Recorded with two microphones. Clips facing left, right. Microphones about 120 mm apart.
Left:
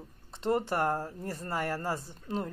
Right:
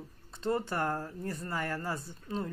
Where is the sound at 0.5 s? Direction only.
30° left (ahead or behind).